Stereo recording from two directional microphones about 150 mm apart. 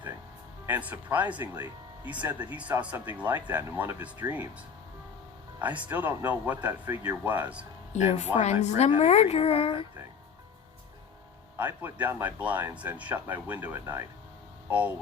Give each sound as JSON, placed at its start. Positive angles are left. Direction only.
{"t": 0.6, "sound": "speech", "side_deg": -10}
{"t": 5.9, "sound": "speech", "side_deg": -10}
{"t": 7.9, "sound": "speech", "side_deg": 50}
{"t": 11.5, "sound": "speech", "side_deg": -15}